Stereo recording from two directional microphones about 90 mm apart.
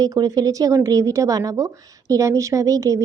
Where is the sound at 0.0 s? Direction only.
45° right (ahead or behind).